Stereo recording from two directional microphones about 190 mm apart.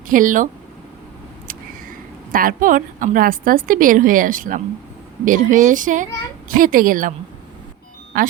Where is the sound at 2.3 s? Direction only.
45° right (ahead or behind).